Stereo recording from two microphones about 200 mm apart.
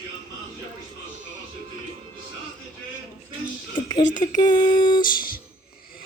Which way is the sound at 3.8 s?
20° left (ahead or behind).